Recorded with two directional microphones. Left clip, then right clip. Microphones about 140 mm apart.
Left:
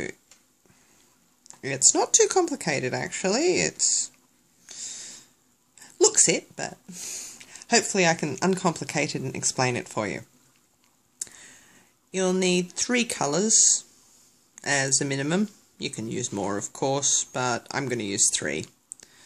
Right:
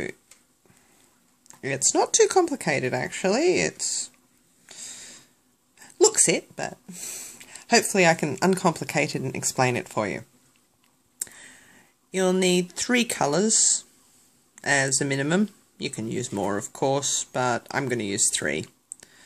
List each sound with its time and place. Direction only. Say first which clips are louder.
1.5 s speech: left 1 dB; 15° right (ahead or behind)
4.6 s a sound: left 2 dB; 15° right (ahead or behind)
5.8 s speech: right 1 dB; 15° right (ahead or behind)